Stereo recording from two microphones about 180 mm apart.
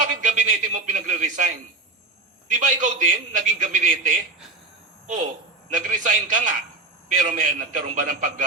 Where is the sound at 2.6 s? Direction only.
45° right (ahead or behind).